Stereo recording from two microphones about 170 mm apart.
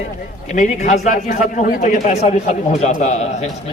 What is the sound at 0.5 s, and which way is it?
A man's voice, 45° left (ahead or behind).